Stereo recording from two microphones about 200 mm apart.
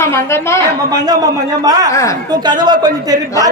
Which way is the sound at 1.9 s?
15° left (ahead or behind).